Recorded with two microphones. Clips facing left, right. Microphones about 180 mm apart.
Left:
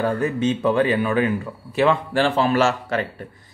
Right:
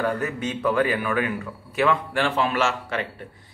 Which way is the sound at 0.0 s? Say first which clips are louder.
Left 5 dB; 30° left (ahead or behind).